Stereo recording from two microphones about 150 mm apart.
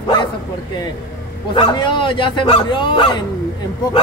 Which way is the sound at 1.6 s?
30° left (ahead or behind).